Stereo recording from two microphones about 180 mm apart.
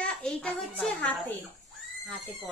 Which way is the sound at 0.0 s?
5° left (ahead or behind).